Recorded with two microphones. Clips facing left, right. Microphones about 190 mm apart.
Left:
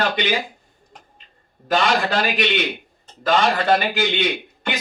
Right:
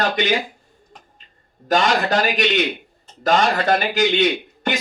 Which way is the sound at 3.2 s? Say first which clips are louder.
Right 1 dB; 45° right (ahead or behind).